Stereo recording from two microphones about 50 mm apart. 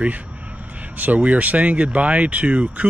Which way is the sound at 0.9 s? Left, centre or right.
Right.